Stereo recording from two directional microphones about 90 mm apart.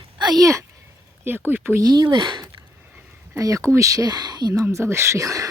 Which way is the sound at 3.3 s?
35° right (ahead or behind).